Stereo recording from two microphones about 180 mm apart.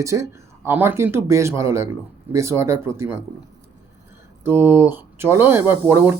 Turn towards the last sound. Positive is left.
turn(degrees=-15)  # may be behind; listen again after turning